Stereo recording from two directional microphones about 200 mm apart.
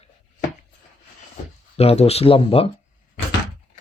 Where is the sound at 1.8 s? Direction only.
30° left (ahead or behind).